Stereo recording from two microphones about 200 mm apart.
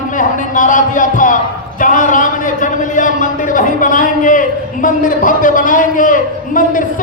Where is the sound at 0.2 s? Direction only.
40° left (ahead or behind).